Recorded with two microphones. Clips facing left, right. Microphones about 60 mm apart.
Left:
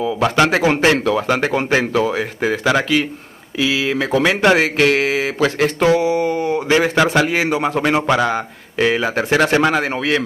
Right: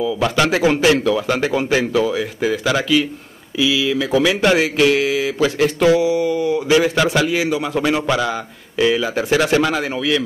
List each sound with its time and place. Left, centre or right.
0.0 s speech: left